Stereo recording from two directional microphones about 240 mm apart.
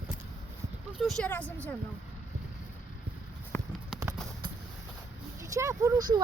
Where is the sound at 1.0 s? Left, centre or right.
Centre.